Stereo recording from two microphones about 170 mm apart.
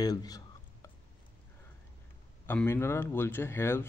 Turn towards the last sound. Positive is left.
turn(degrees=15)  # may be behind; listen again after turning